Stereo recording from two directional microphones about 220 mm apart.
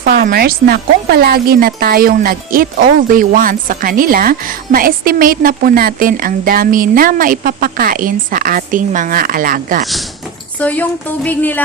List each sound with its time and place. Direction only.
0.0 s speech: 40° right (ahead or behind)
9.8 s speech: centre (ahead or behind)